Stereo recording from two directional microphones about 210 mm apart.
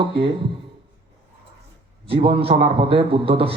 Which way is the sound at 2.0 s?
25° right (ahead or behind).